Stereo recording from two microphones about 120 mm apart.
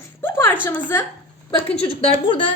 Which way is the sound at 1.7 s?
55° left (ahead or behind).